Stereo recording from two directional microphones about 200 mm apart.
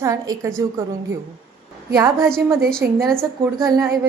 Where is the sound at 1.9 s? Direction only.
15° right (ahead or behind).